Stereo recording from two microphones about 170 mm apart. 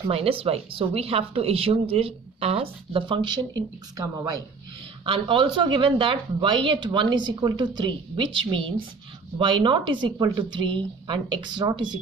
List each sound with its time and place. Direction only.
0.0 s speech: 35° right (ahead or behind)